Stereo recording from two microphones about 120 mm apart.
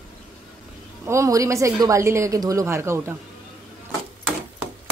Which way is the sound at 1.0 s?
25° right (ahead or behind).